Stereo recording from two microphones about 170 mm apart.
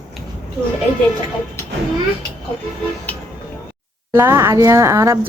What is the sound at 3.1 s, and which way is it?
Vehicle horn, 10° left (ahead or behind).